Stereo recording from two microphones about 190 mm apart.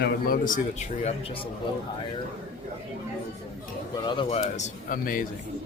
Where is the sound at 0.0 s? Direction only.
45° left (ahead or behind).